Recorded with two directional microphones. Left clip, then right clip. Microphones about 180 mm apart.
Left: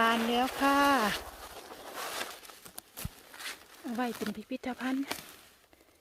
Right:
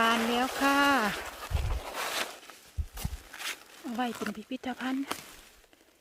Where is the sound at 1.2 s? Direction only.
40° right (ahead or behind).